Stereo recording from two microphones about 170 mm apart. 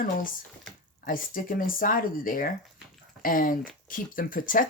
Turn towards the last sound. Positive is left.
turn(degrees=55)  # may be behind; listen again after turning